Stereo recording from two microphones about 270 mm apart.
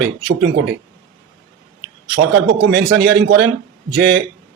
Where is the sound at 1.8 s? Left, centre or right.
Right.